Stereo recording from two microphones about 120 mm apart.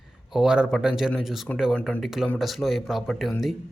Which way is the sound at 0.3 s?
5° right (ahead or behind).